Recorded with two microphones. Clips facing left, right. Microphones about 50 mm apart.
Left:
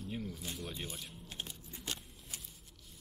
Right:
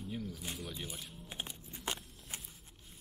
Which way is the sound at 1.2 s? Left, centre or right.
Centre.